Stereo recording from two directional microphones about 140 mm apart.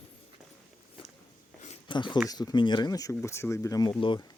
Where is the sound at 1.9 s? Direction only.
35° left (ahead or behind).